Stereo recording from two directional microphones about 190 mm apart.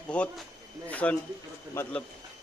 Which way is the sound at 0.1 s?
5° left (ahead or behind).